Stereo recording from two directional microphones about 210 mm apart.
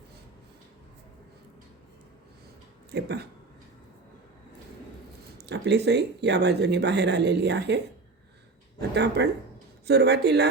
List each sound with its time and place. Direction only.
2.9 s speech: 50° right (ahead or behind)
5.4 s speech: 55° right (ahead or behind)
9.0 s speech: 55° right (ahead or behind)